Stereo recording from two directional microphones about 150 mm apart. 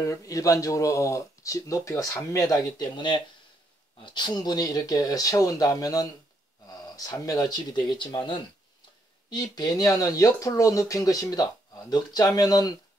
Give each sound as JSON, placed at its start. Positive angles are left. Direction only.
{"t": 0.0, "sound": "speech", "side_deg": 20}
{"t": 9.3, "sound": "speech", "side_deg": 25}